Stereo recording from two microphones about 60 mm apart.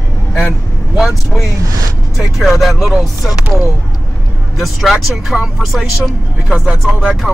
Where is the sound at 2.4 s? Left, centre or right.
Centre.